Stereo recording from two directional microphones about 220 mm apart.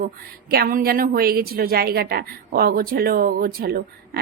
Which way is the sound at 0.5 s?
45° right (ahead or behind).